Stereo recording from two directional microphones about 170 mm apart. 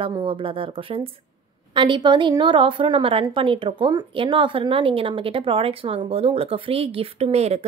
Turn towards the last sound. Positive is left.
turn(degrees=-40)  # may be behind; listen again after turning